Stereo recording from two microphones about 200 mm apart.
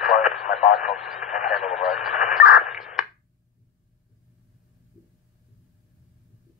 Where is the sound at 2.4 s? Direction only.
40° left (ahead or behind).